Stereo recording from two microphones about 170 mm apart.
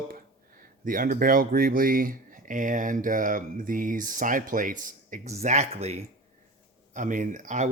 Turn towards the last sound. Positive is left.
turn(degrees=-45)  # may be behind; listen again after turning